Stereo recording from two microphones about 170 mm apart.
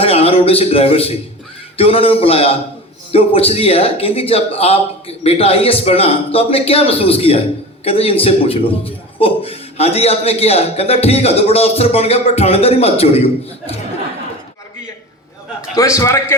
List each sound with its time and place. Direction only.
0.0 s a man's voice: 35° left (ahead or behind)
15.7 s a man's voice: 20° left (ahead or behind)